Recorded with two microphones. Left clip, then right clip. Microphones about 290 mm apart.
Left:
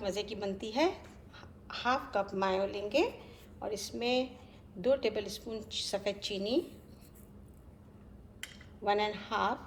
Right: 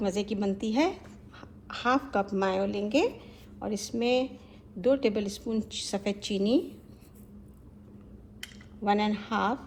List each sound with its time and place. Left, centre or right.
0.0 s a woman's voice: centre
8.8 s a woman's voice: right